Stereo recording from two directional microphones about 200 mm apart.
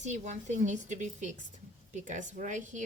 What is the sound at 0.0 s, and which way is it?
Speech, 35° right (ahead or behind).